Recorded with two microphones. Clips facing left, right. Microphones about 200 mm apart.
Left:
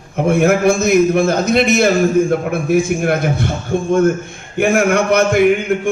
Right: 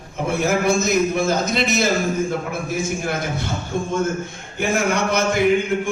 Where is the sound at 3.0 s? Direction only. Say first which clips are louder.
Left 8 dB; 60° left (ahead or behind).